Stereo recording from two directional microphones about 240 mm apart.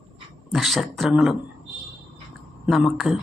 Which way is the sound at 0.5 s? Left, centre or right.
Centre.